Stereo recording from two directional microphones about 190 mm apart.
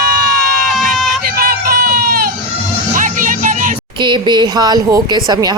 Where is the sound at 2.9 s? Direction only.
45° right (ahead or behind).